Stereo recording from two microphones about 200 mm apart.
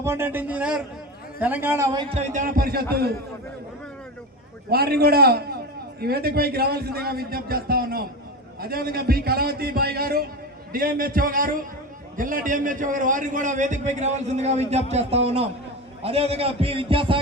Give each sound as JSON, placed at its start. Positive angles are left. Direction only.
{"t": 0.0, "sound": "a man's voice", "side_deg": -10}
{"t": 4.7, "sound": "a man's voice", "side_deg": -50}